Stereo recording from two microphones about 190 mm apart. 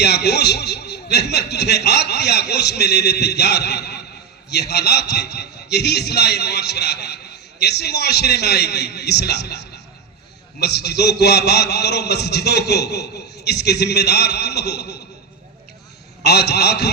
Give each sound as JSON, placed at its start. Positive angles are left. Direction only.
{"t": 0.0, "sound": "a man's voice", "side_deg": 60}
{"t": 16.2, "sound": "a man's voice", "side_deg": 60}